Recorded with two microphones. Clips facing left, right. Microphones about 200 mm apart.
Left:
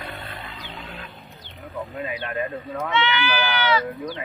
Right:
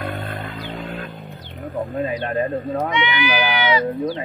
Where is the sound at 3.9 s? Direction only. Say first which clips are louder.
Right 7 dB; 35° right (ahead or behind).